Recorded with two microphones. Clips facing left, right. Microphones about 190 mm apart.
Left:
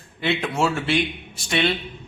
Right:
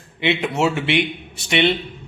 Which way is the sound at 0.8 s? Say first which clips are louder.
Right 2 dB; 65° right (ahead or behind).